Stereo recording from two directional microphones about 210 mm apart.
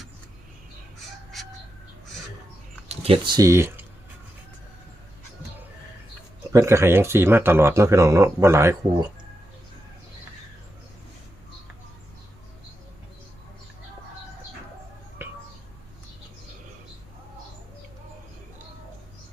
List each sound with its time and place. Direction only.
1.3 s chicken: centre (ahead or behind)
2.9 s speech: 30° right (ahead or behind)
6.5 s speech: 15° right (ahead or behind)
15.2 s a sound: 10° right (ahead or behind)